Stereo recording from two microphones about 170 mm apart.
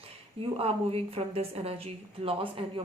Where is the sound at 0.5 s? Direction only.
35° right (ahead or behind).